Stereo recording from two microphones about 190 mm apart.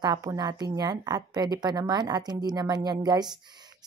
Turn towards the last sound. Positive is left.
turn(degrees=-20)  # may be behind; listen again after turning